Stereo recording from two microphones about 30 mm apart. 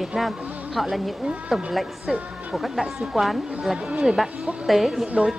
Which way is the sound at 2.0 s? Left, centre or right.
Right.